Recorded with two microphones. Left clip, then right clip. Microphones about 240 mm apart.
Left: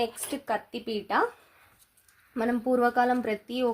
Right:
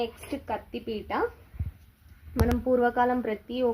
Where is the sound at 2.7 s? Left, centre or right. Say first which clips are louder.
Even; left.